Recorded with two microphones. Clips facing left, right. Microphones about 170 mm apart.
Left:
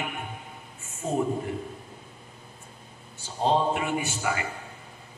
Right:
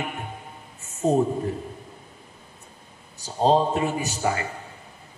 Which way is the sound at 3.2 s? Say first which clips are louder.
Right 4 dB; 35° right (ahead or behind).